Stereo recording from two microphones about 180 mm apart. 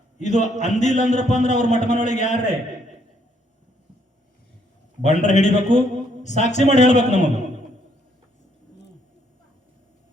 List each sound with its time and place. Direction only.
0.2 s a man's voice: 40° left (ahead or behind)
5.0 s a man's voice: 40° left (ahead or behind)